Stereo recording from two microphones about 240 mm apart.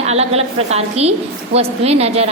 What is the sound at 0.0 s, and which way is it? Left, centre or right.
A woman's voice, right.